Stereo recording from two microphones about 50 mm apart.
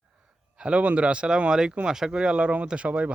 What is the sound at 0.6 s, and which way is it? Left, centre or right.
Speech, right.